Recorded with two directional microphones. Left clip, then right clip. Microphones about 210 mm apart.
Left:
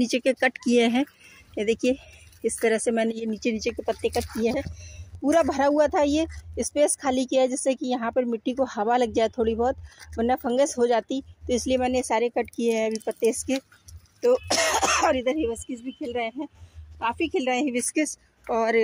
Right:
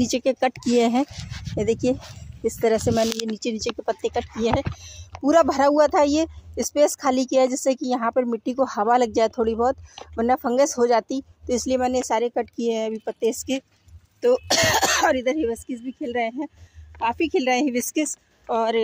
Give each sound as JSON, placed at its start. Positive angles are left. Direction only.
{"t": 0.0, "sound": "speech", "side_deg": 0}
{"t": 14.2, "sound": "speech", "side_deg": -20}
{"t": 17.9, "sound": "a woman's voice", "side_deg": -5}